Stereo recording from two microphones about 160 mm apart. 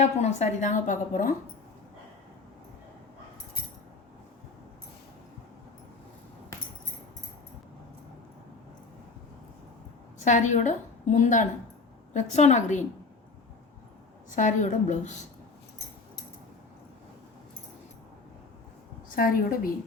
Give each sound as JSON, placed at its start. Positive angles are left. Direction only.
{"t": 0.0, "sound": "a woman's voice", "side_deg": 45}
{"t": 10.2, "sound": "a woman's voice", "side_deg": 50}
{"t": 14.3, "sound": "a woman's voice", "side_deg": 50}
{"t": 19.1, "sound": "a woman's voice", "side_deg": 65}